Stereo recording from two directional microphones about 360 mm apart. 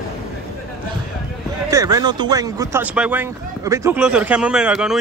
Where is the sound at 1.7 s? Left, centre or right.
Centre.